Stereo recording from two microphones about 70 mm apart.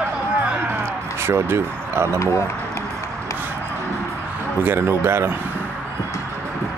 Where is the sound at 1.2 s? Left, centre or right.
Right.